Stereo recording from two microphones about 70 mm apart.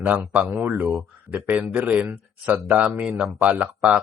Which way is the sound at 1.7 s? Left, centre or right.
Right.